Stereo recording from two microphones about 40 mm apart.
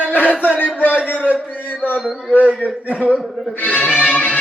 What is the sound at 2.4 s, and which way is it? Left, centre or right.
Music, right.